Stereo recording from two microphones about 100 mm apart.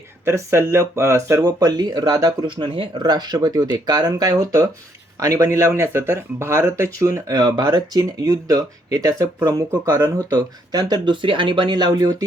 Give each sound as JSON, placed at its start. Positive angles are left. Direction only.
{"t": 0.3, "sound": "speech", "side_deg": -25}
{"t": 10.2, "sound": "speech", "side_deg": -45}